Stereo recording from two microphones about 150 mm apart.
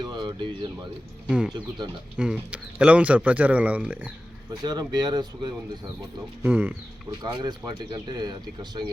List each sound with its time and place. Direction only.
0.0 s a sound: 30° right (ahead or behind)
1.3 s speech: 5° right (ahead or behind)
4.6 s speech: 25° right (ahead or behind)
6.4 s speech: 10° right (ahead or behind)
7.2 s speech: 30° right (ahead or behind)